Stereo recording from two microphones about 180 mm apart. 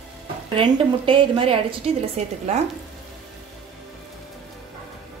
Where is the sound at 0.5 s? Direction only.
30° right (ahead or behind).